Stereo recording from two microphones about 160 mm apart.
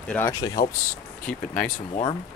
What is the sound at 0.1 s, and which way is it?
Speech, 15° left (ahead or behind).